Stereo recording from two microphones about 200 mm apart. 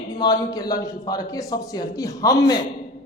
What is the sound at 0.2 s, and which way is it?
A man's voice, 20° left (ahead or behind).